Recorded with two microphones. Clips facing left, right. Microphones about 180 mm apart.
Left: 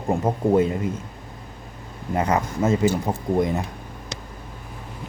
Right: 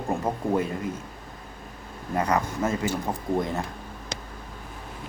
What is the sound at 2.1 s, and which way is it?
Speech, 20° left (ahead or behind).